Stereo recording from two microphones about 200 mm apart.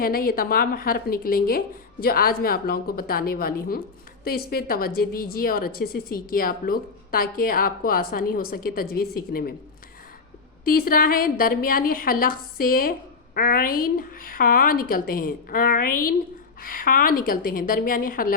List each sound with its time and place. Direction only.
0.0 s a woman's voice: 45° left (ahead or behind)
10.7 s a woman's voice: 45° left (ahead or behind)